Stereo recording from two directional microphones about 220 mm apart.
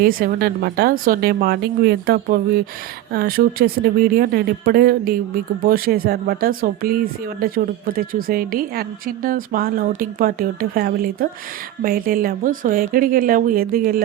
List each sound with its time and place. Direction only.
0.0 s speech: 45° right (ahead or behind)